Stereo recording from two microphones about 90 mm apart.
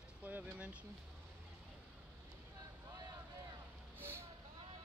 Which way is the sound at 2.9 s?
45° right (ahead or behind).